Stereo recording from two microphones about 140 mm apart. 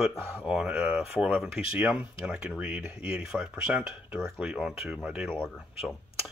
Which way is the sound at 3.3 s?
5° right (ahead or behind).